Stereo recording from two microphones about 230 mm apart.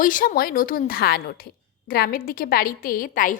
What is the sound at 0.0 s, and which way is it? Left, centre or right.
A woman's voice, left.